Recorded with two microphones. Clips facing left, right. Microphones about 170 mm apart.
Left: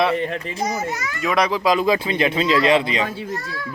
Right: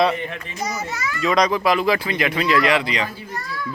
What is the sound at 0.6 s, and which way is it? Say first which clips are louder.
Speech: left 1 dB; 50° left (ahead or behind).